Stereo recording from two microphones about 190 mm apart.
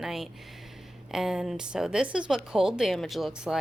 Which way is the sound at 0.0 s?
Centre (ahead or behind).